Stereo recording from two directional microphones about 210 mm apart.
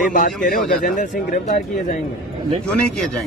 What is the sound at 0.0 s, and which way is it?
Speech, 40° left (ahead or behind).